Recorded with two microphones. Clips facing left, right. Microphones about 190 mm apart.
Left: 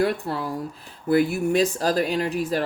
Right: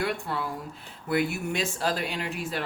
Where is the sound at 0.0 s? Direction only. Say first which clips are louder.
Left 6 dB; 35° left (ahead or behind).